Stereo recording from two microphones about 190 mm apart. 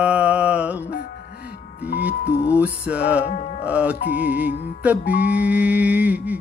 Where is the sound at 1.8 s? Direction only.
60° left (ahead or behind).